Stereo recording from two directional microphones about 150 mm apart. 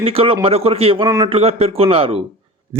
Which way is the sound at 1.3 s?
40° right (ahead or behind).